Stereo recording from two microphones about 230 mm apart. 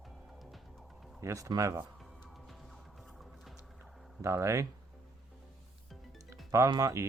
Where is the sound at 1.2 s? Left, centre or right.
Centre.